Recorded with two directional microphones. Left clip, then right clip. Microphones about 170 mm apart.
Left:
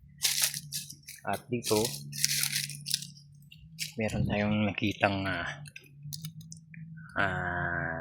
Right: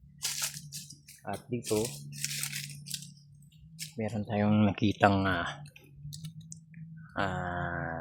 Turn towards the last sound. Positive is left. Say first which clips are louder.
# left 3 dB
turn(degrees=-15)  # may be behind; listen again after turning